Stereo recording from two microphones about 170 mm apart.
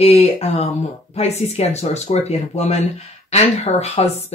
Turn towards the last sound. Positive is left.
turn(degrees=40)  # may be behind; listen again after turning